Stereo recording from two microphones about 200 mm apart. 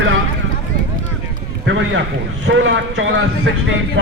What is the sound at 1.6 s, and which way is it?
A man's voice, 70° right (ahead or behind).